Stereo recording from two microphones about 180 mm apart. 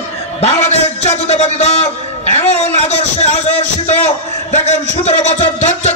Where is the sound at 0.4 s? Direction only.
35° left (ahead or behind).